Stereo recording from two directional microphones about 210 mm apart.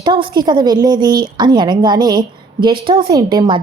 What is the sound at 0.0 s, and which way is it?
A woman's voice, 20° right (ahead or behind).